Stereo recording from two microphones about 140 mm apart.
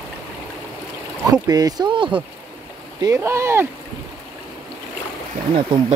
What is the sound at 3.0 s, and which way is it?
Speech, 20° right (ahead or behind).